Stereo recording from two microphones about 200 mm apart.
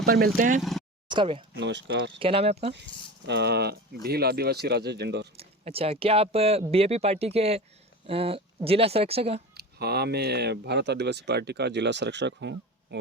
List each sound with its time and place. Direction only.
0.0 s speech: 50° right (ahead or behind)
0.6 s speech: centre (ahead or behind)
1.0 s speech: 25° right (ahead or behind)
1.5 s speech: 60° right (ahead or behind)
2.1 s speech: 25° right (ahead or behind)
3.2 s speech: 55° right (ahead or behind)
5.4 s speech: 30° right (ahead or behind)
9.6 s speech: 55° right (ahead or behind)